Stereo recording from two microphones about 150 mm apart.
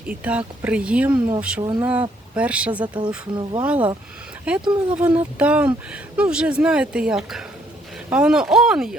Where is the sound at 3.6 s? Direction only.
10° right (ahead or behind).